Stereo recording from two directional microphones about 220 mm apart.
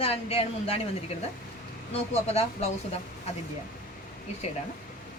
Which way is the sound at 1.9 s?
30° left (ahead or behind).